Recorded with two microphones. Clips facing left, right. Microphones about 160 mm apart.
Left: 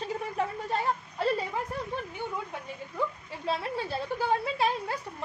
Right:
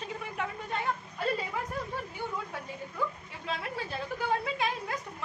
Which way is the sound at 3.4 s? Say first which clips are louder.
Left 5 dB; 30° left (ahead or behind).